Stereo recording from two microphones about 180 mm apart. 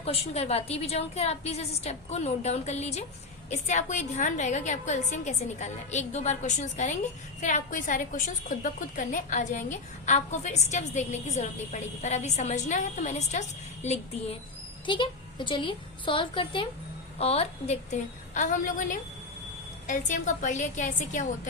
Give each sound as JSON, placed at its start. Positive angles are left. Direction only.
{"t": 0.0, "sound": "a woman's voice", "side_deg": 35}
{"t": 14.8, "sound": "a woman's voice", "side_deg": 25}